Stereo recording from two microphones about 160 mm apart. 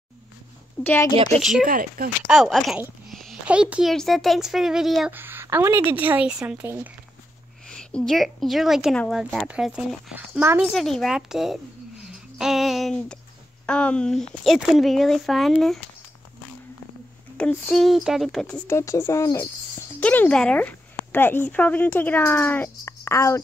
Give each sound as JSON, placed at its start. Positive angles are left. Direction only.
{"t": 0.8, "sound": "speech", "side_deg": 15}
{"t": 1.3, "sound": "speech", "side_deg": 0}
{"t": 1.6, "sound": "speech", "side_deg": -60}
{"t": 2.2, "sound": "speech", "side_deg": -5}
{"t": 3.1, "sound": "a sound", "side_deg": 0}
{"t": 3.9, "sound": "speech", "side_deg": 0}
{"t": 5.1, "sound": "a woman's voice", "side_deg": -15}
{"t": 7.6, "sound": "a woman's voice", "side_deg": 5}
{"t": 10.7, "sound": "speech", "side_deg": 0}
{"t": 12.1, "sound": "a sound", "side_deg": -5}
{"t": 13.7, "sound": "speech", "side_deg": 5}
{"t": 17.4, "sound": "speech", "side_deg": 5}
{"t": 18.7, "sound": "a woman's voice", "side_deg": 15}